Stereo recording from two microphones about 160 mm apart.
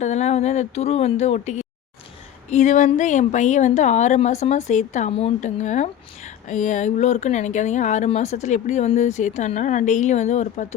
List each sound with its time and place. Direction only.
0.0 s speech: 45° left (ahead or behind)